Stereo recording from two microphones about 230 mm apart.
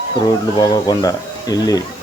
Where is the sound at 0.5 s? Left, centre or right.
Centre.